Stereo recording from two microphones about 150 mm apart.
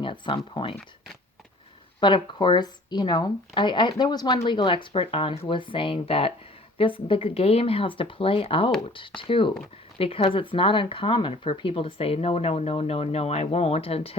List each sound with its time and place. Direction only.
0.0 s speech: 35° left (ahead or behind)
2.0 s speech: 30° left (ahead or behind)